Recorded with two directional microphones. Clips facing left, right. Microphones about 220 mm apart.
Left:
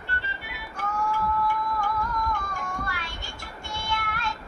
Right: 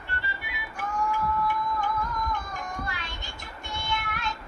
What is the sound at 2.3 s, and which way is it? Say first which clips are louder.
Child singing: left 1 dB; 20° right (ahead or behind).